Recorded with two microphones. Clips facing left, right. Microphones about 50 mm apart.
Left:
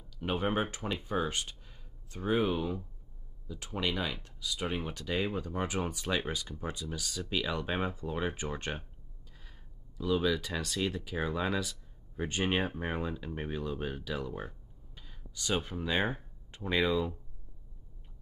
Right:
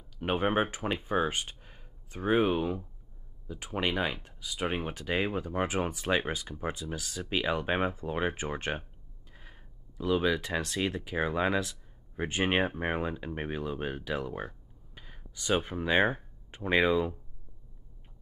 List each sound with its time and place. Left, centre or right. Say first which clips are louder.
0.2 s speech: right 4 dB; right
1.0 s speech: right 3 dB; right
1.6 s a sound: right 3 dB; right
2.2 s speech: right 3 dB; right